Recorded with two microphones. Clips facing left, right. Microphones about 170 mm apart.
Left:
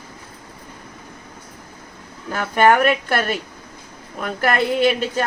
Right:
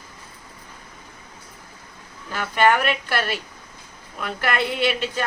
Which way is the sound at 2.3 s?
45° left (ahead or behind).